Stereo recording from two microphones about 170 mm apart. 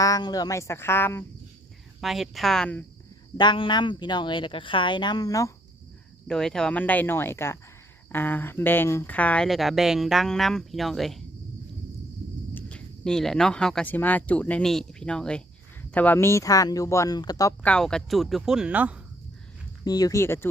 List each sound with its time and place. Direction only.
0.0 s speech: 20° left (ahead or behind)
2.0 s speech: centre (ahead or behind)
3.3 s speech: 25° left (ahead or behind)
6.2 s speech: 5° left (ahead or behind)
12.5 s speech: 5° left (ahead or behind)
17.6 s speech: 5° left (ahead or behind)
19.8 s speech: 20° left (ahead or behind)